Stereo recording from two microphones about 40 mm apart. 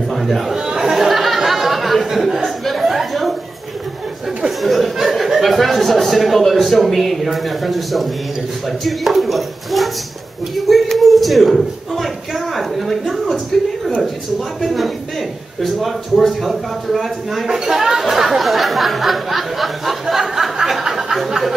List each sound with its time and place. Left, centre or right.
0.1 s a man's voice: centre
0.7 s chatter: centre
2.1 s chuckle: centre
4.5 s chatter: centre
4.9 s speech: centre
10.5 s a sound: centre
12.5 s speech: centre
14.6 s speech: centre
17.5 s a sound: centre